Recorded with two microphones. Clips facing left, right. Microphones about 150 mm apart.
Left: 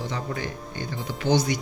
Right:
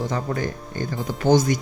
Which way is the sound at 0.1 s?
45° right (ahead or behind).